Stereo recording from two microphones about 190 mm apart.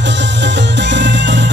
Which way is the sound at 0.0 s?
65° right (ahead or behind).